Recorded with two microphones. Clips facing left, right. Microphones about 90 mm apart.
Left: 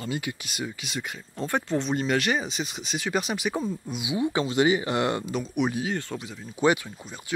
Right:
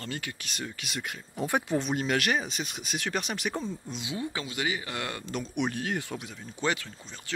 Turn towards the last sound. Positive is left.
turn(degrees=15)  # may be behind; listen again after turning